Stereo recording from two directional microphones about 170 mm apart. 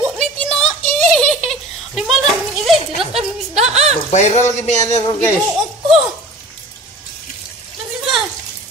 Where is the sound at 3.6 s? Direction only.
40° right (ahead or behind).